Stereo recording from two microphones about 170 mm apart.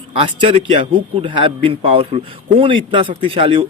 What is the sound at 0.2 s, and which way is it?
A man's voice, 35° right (ahead or behind).